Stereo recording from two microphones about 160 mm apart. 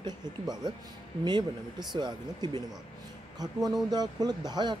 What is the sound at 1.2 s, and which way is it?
A man's voice, 25° right (ahead or behind).